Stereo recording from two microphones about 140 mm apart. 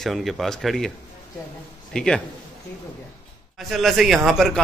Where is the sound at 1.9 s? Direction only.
5° left (ahead or behind).